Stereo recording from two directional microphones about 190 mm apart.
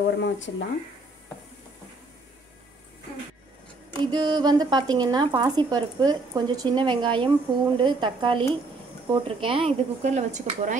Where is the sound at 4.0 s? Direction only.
25° right (ahead or behind).